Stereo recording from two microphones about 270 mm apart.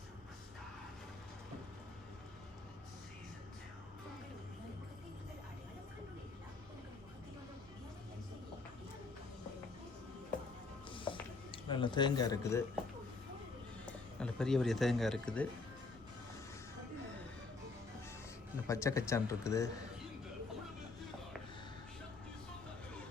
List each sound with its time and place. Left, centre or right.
10.9 s a sound: centre
14.2 s speech: centre
18.7 s speech: centre